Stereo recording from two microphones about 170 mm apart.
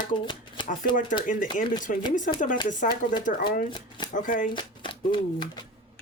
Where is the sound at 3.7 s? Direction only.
25° left (ahead or behind).